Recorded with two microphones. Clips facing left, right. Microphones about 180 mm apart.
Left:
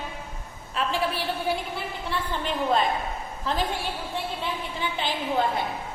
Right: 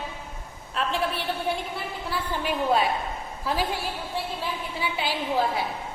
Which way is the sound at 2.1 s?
10° right (ahead or behind).